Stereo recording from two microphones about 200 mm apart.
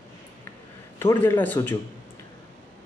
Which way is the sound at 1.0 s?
15° left (ahead or behind).